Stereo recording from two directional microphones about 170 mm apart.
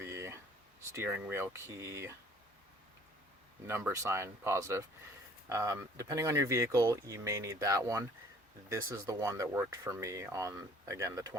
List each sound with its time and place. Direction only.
0.0 s a sound: 15° right (ahead or behind)
0.9 s speech: 15° right (ahead or behind)
3.7 s speech: 15° right (ahead or behind)